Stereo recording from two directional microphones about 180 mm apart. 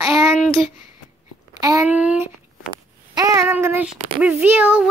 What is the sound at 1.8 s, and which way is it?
Speech, 10° right (ahead or behind).